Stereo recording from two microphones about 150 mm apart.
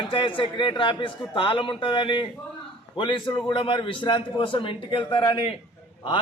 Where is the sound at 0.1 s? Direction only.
35° left (ahead or behind).